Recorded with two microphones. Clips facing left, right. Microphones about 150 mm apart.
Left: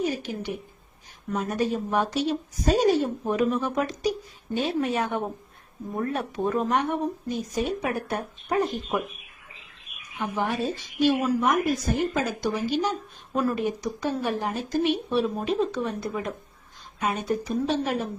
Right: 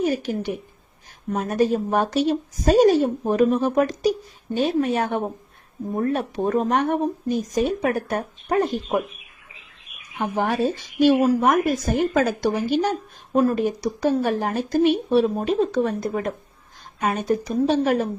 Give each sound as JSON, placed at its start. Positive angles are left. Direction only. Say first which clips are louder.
{"t": 0.0, "sound": "speech", "louder": "right 5 dB", "side_deg": -45}
{"t": 3.2, "sound": "speech", "louder": "right 6 dB", "side_deg": -35}
{"t": 6.7, "sound": "speech", "louder": "right 4 dB", "side_deg": -45}
{"t": 10.2, "sound": "speech", "louder": "right 5 dB", "side_deg": -50}
{"t": 13.3, "sound": "speech", "louder": "right 6 dB", "side_deg": -30}
{"t": 14.0, "sound": "speech", "louder": "right 7 dB", "side_deg": -45}
{"t": 17.7, "sound": "speech", "louder": "right 8 dB", "side_deg": -45}